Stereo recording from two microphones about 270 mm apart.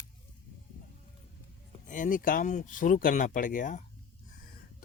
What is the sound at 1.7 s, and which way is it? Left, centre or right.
Speech, left.